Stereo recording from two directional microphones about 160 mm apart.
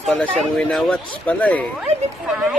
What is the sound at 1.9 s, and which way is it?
Speech, 45° right (ahead or behind).